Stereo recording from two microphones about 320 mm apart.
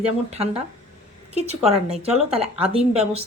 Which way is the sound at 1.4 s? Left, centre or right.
Centre.